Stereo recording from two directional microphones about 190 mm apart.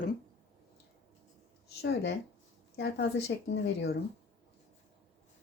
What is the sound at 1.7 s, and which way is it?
Speech, 65° left (ahead or behind).